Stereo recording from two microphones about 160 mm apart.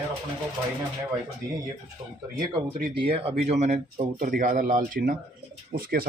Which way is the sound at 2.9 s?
35° right (ahead or behind).